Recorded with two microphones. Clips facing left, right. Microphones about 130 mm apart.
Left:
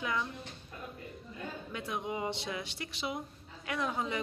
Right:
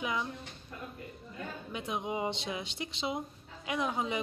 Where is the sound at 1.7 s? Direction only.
20° right (ahead or behind).